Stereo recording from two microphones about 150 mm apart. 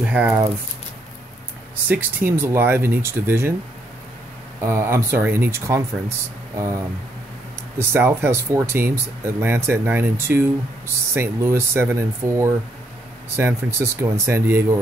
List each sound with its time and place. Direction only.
0.0 s speech: 5° right (ahead or behind)
1.9 s speech: 10° right (ahead or behind)
4.6 s speech: 15° right (ahead or behind)
7.8 s speech: 15° right (ahead or behind)